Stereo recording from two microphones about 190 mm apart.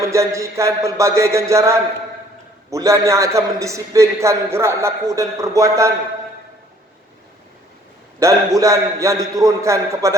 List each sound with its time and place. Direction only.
0.0 s a man's voice: 15° right (ahead or behind)
8.2 s a man's voice: 15° right (ahead or behind)